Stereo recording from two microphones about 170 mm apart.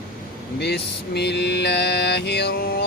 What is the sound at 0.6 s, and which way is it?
Mantra, 75° left (ahead or behind).